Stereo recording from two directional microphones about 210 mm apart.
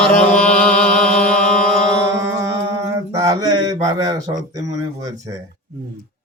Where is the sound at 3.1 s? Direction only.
15° right (ahead or behind).